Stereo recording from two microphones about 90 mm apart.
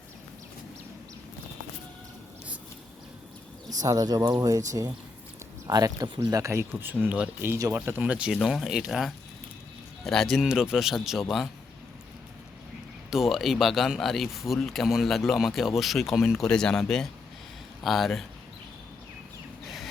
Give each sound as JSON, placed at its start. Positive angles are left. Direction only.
{"t": 3.8, "sound": "speech", "side_deg": -45}
{"t": 7.5, "sound": "speech", "side_deg": -30}
{"t": 7.8, "sound": "speech", "side_deg": -20}
{"t": 8.3, "sound": "speech", "side_deg": 0}
{"t": 13.1, "sound": "speech", "side_deg": -5}
{"t": 19.6, "sound": "a sound", "side_deg": 0}